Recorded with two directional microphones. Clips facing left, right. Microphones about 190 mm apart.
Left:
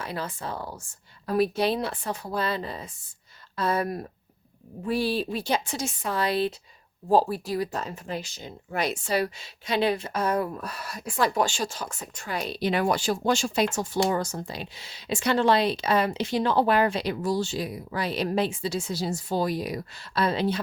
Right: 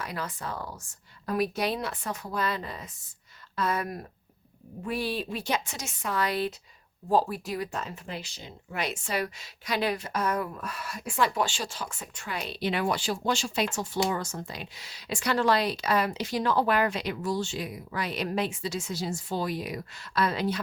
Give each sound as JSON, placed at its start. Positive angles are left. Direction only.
{"t": 0.1, "sound": "speech", "side_deg": 30}